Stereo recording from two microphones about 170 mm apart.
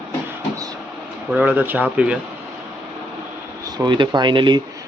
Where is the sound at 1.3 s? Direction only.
10° right (ahead or behind).